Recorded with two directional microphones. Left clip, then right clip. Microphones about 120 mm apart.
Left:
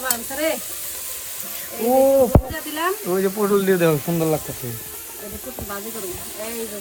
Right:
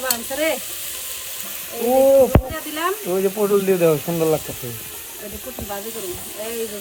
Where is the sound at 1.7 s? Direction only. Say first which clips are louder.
Even; 45° left (ahead or behind).